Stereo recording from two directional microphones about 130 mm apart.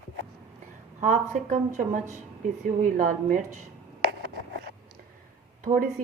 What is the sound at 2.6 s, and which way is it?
Speech, 90° right.